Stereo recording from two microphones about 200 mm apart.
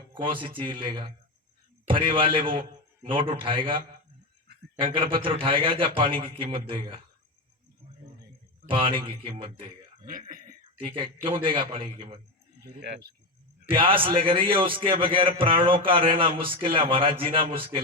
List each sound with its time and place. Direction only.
0.1 s a man's voice: 25° right (ahead or behind)
4.9 s a man's voice: 25° right (ahead or behind)
8.6 s a man's voice: 25° right (ahead or behind)
10.1 s cough: 45° right (ahead or behind)
10.8 s a man's voice: 25° right (ahead or behind)
12.8 s speech: 60° right (ahead or behind)
13.7 s a man's voice: 25° right (ahead or behind)